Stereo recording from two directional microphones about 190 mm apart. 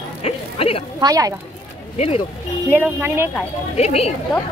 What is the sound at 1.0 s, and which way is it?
Speech, 20° right (ahead or behind).